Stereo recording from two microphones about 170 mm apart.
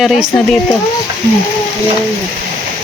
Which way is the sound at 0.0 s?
Centre (ahead or behind).